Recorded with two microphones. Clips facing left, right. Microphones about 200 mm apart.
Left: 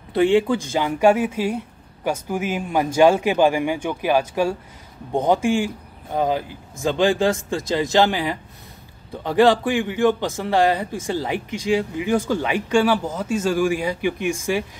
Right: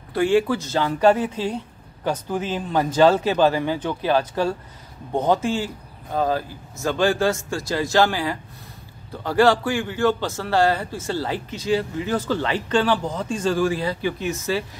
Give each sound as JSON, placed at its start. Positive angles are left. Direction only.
{"t": 0.1, "sound": "a man's voice", "side_deg": 20}